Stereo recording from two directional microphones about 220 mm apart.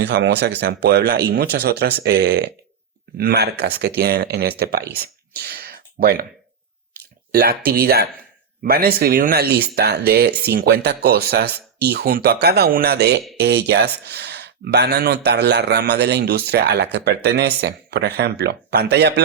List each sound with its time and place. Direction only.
0.0 s speech: 50° right (ahead or behind)
4.9 s a sound: 45° right (ahead or behind)
7.3 s speech: 45° right (ahead or behind)